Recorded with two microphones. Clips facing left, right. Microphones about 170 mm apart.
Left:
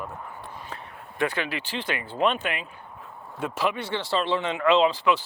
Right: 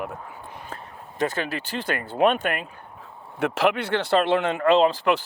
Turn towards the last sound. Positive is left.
turn(degrees=-50)  # may be behind; listen again after turning